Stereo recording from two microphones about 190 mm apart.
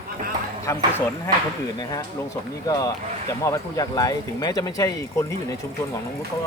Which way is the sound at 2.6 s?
20° left (ahead or behind).